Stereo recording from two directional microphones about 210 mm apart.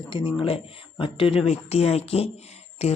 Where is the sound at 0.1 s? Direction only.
25° left (ahead or behind).